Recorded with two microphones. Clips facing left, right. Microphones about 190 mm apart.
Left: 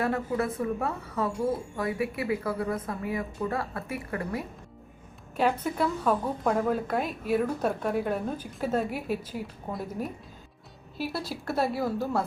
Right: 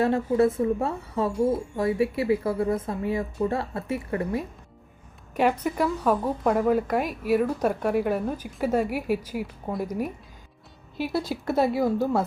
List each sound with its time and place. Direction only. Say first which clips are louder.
0.0 s a woman's voice: right 7 dB; 25° right (ahead or behind)
5.4 s a woman's voice: right 3 dB; 10° right (ahead or behind)
11.5 s a woman's voice: right 5 dB; centre (ahead or behind)
11.8 s a woman's voice: right 5 dB; 20° right (ahead or behind)